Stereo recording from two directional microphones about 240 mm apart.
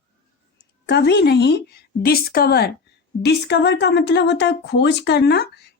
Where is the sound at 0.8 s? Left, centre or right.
Left.